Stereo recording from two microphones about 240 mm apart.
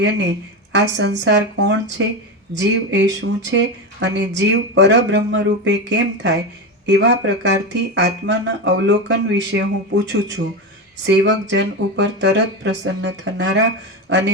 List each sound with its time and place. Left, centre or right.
0.0 s speech: right
11.0 s speech: right